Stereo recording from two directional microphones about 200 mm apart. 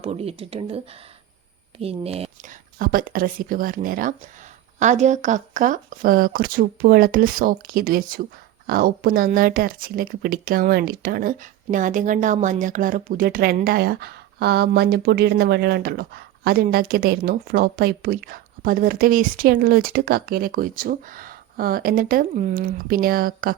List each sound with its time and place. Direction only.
0.0 s speech: 30° right (ahead or behind)
1.8 s speech: 30° right (ahead or behind)
2.7 s speech: 45° right (ahead or behind)